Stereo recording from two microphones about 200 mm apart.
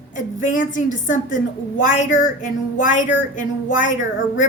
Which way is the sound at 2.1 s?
75° left (ahead or behind).